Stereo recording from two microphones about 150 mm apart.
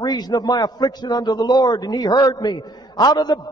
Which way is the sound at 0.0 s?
25° left (ahead or behind).